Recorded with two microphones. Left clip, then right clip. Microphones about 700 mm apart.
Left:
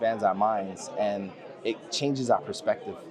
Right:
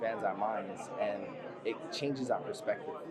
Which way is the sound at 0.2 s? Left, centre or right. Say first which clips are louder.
Left 9 dB; left.